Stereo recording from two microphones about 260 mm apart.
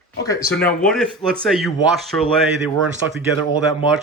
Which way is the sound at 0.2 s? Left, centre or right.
Centre.